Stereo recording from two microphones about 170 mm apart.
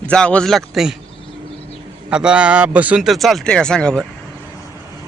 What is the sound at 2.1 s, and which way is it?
Speech, 5° right (ahead or behind).